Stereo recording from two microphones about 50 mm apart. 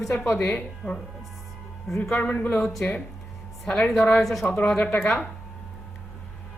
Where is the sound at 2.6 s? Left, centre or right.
Centre.